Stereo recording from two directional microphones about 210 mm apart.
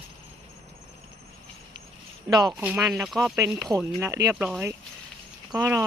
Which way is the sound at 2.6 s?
5° right (ahead or behind).